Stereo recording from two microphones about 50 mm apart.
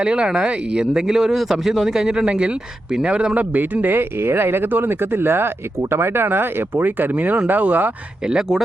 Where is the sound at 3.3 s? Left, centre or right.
Right.